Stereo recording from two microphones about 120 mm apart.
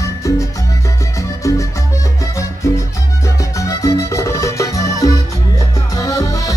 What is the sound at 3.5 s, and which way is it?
Music, 25° left (ahead or behind).